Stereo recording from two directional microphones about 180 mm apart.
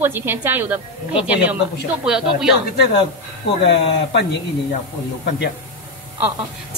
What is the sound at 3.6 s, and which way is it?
Speech, 75° left (ahead or behind).